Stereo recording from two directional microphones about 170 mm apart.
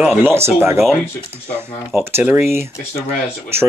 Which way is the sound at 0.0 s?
10° right (ahead or behind).